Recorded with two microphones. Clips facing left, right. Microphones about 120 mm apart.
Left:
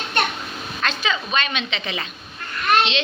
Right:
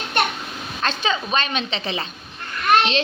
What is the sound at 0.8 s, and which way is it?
A woman's voice, 30° right (ahead or behind).